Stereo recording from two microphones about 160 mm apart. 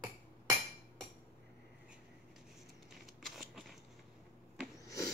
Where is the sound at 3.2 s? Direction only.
Centre (ahead or behind).